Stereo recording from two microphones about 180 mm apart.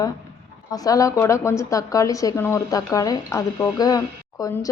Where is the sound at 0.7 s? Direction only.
20° left (ahead or behind).